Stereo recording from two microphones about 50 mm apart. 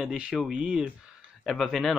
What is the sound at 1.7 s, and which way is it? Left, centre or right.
Speech, centre.